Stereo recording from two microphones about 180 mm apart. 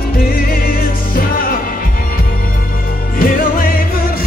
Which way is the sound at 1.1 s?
50° left (ahead or behind).